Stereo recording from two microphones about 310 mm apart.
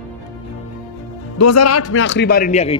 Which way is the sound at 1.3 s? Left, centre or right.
Left.